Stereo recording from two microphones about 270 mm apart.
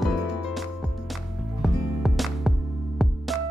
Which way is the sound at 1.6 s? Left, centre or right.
Centre.